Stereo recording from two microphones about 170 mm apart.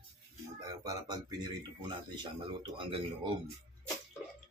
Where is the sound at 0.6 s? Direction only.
20° right (ahead or behind).